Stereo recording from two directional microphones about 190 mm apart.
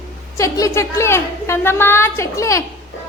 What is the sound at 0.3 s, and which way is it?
A woman's voice, 15° left (ahead or behind).